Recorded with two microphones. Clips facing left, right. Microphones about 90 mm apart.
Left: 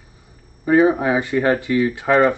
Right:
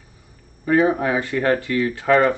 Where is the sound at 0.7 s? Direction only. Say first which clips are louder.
Left 3 dB; 15° left (ahead or behind).